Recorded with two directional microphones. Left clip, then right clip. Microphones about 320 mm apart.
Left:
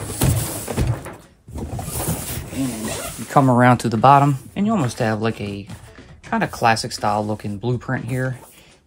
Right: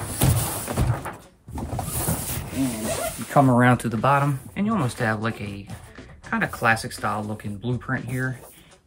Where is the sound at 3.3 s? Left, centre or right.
Centre.